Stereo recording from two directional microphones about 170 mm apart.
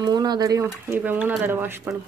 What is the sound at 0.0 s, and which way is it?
Speech, 25° right (ahead or behind).